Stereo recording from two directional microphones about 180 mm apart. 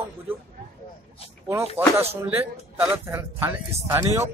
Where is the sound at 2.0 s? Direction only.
10° right (ahead or behind).